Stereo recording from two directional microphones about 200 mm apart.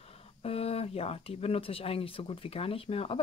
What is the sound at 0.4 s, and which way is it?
Speech, 30° left (ahead or behind).